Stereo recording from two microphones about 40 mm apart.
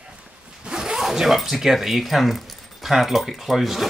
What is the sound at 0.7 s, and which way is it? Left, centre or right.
Speech, centre.